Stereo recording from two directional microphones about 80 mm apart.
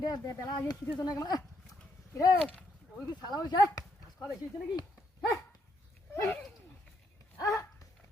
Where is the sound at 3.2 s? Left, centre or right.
Left.